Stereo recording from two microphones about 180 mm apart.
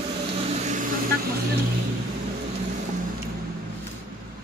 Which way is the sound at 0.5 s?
40° right (ahead or behind).